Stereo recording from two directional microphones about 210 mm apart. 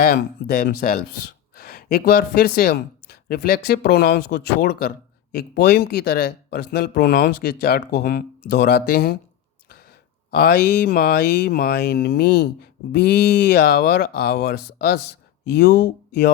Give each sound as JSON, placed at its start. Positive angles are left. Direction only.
{"t": 0.0, "sound": "speech", "side_deg": 45}
{"t": 10.3, "sound": "speech", "side_deg": 45}